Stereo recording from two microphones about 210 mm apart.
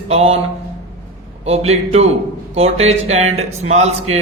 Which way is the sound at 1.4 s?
30° right (ahead or behind).